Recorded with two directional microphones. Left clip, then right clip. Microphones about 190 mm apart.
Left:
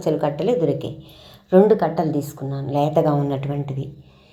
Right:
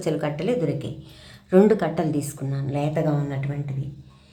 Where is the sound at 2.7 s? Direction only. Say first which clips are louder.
Left 7 dB; 15° left (ahead or behind).